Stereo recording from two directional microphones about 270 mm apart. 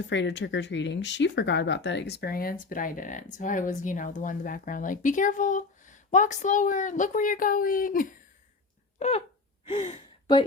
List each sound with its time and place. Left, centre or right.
0.0 s speech: left
9.0 s a sound: left
9.6 s gasp: left